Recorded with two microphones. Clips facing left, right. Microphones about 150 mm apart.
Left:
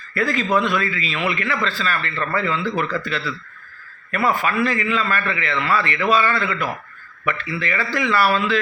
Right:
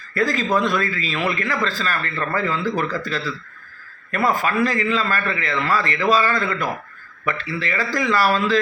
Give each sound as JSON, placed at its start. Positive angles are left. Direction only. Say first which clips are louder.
{"t": 0.1, "sound": "a man's voice", "louder": "even", "side_deg": -40}